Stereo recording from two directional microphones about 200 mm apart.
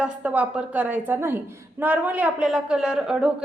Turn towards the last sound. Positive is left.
turn(degrees=-5)  # may be behind; listen again after turning